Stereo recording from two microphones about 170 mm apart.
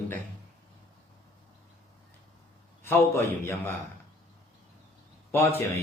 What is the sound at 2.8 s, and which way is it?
Speech, 15° left (ahead or behind).